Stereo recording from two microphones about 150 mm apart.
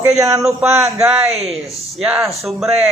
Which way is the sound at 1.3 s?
45° right (ahead or behind).